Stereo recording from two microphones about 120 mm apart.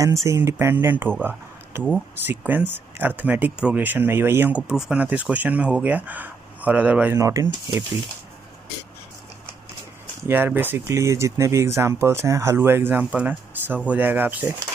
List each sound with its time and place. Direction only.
0.0 s speech: 25° right (ahead or behind)
7.2 s speech: 25° right (ahead or behind)
10.2 s speech: 15° right (ahead or behind)